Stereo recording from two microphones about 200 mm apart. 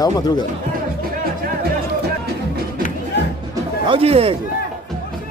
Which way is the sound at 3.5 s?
25° right (ahead or behind).